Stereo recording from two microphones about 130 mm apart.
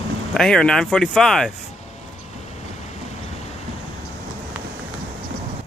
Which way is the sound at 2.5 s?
60° left (ahead or behind).